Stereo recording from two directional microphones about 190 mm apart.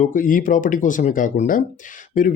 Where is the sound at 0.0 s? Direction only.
45° left (ahead or behind).